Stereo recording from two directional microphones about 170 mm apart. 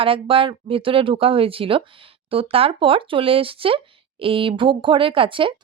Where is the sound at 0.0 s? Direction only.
30° right (ahead or behind).